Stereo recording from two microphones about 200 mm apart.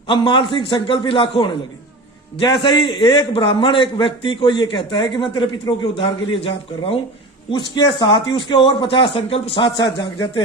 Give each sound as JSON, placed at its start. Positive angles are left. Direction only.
{"t": 0.1, "sound": "a man's voice", "side_deg": 25}
{"t": 7.5, "sound": "a man's voice", "side_deg": 20}